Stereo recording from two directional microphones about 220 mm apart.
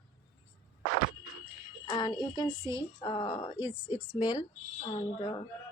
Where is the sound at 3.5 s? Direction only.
10° right (ahead or behind).